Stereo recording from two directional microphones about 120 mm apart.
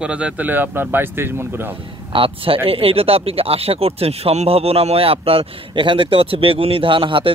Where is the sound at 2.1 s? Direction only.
50° right (ahead or behind).